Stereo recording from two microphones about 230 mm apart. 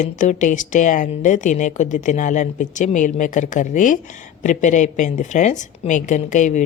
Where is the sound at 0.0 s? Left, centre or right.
Left.